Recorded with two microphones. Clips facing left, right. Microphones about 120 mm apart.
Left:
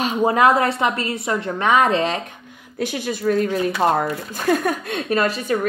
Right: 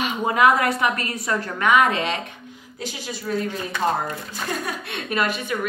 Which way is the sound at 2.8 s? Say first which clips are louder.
Left 9 dB; 55° left (ahead or behind).